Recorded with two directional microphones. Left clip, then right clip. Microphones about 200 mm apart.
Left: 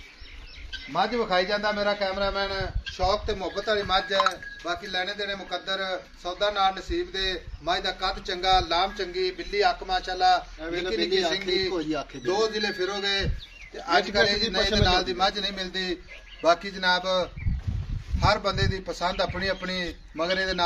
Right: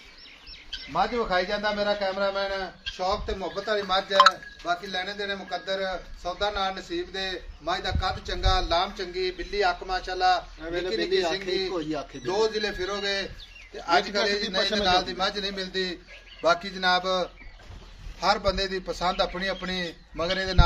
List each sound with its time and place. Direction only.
0.9 s a man's voice: 30° left (ahead or behind)
10.6 s a man's voice: 30° left (ahead or behind)
11.1 s a man's voice: 20° left (ahead or behind); by 20.6 s centre (ahead or behind)